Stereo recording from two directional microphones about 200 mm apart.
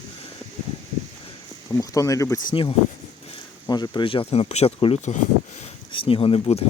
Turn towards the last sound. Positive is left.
turn(degrees=30)  # may be behind; listen again after turning